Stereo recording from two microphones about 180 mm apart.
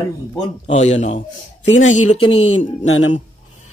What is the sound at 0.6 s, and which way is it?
Speech, 40° left (ahead or behind).